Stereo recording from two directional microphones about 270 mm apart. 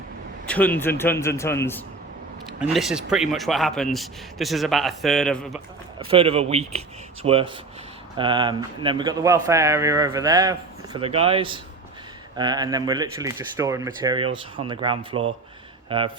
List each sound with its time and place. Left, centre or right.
0.4 s a man's voice: centre
2.6 s speech: centre
6.0 s speech: centre